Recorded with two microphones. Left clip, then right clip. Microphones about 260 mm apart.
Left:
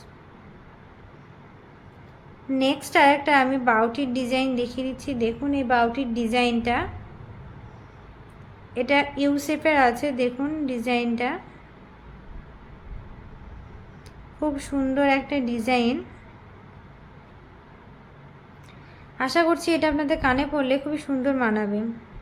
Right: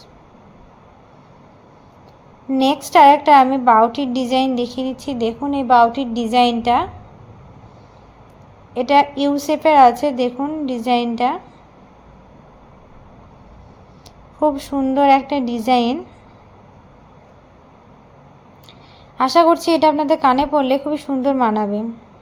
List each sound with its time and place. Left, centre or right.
2.5 s a woman's voice: centre
8.7 s a woman's voice: centre
14.3 s a woman's voice: centre
19.1 s a woman's voice: centre